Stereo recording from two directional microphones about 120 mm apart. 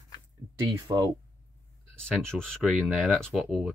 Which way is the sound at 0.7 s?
35° right (ahead or behind).